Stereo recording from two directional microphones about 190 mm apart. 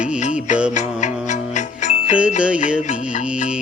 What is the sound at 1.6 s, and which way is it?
Music, 40° left (ahead or behind).